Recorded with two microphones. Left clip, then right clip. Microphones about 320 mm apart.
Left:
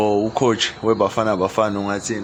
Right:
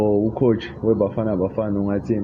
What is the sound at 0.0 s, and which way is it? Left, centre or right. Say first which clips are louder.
Speech: left 1 dB; left.